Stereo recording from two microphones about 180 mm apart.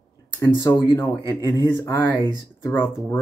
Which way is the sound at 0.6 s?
15° left (ahead or behind).